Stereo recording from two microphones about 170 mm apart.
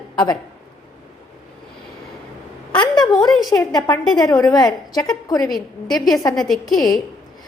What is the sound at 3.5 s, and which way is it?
A woman's voice, 20° left (ahead or behind).